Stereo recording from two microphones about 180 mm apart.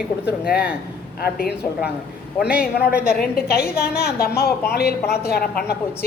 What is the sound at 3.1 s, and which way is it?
A woman's voice, 60° left (ahead or behind).